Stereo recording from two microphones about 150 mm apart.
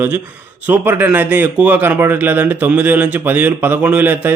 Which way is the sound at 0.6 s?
10° right (ahead or behind).